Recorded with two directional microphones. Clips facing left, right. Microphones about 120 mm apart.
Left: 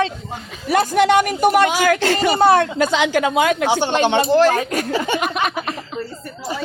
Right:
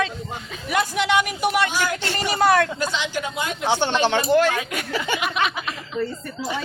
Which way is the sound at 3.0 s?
90° left.